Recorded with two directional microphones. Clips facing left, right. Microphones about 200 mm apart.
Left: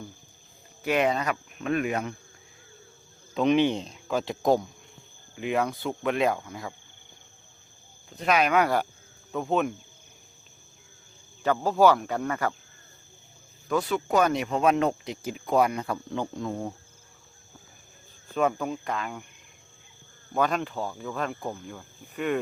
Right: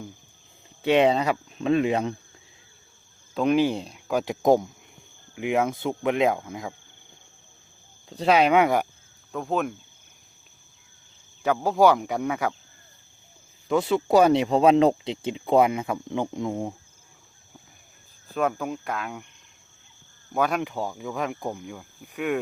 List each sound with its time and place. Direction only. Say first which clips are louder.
0.8 s speech: right 5 dB; 25° right (ahead or behind)
3.3 s speech: right 1 dB; 5° right (ahead or behind)
8.1 s speech: right 4 dB; 30° right (ahead or behind)
9.3 s speech: left 1 dB; centre (ahead or behind)
11.4 s speech: right 1 dB; 10° right (ahead or behind)
13.7 s speech: right 4 dB; 25° right (ahead or behind)
18.3 s speech: even; centre (ahead or behind)
20.3 s speech: right 1 dB; 10° right (ahead or behind)